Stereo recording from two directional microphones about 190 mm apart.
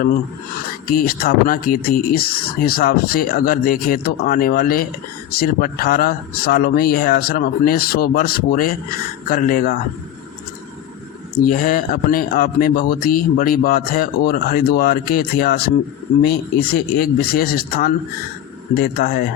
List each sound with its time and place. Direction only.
0.9 s speech: 50° left (ahead or behind)
11.3 s speech: 45° left (ahead or behind)